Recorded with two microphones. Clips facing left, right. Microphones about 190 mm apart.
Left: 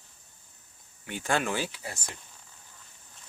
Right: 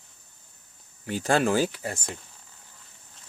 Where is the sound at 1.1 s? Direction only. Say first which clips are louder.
Right 6 dB; 35° right (ahead or behind).